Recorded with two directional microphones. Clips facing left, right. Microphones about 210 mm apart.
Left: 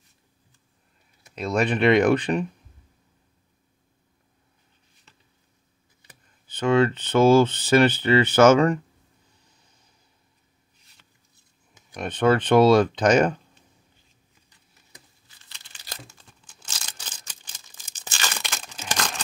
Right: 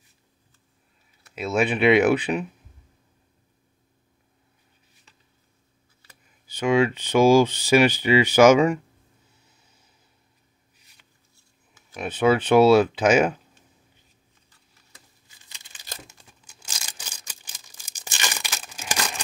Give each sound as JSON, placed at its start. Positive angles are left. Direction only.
{"t": 1.3, "sound": "speech", "side_deg": -5}
{"t": 6.4, "sound": "speech", "side_deg": -10}
{"t": 11.9, "sound": "speech", "side_deg": -5}
{"t": 15.4, "sound": "crumpling", "side_deg": -15}
{"t": 16.6, "sound": "a sound", "side_deg": -10}